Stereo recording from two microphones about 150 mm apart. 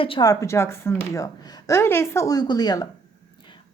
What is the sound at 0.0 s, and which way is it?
Speech, 35° left (ahead or behind).